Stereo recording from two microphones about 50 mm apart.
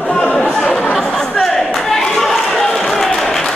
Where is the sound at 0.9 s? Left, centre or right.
Centre.